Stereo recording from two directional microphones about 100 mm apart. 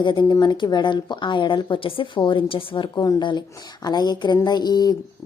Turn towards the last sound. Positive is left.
turn(degrees=45)  # may be behind; listen again after turning